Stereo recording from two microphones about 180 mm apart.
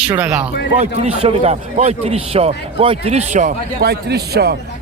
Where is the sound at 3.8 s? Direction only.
60° right (ahead or behind).